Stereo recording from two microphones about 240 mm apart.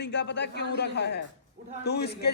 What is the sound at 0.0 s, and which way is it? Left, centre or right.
A man's voice, left.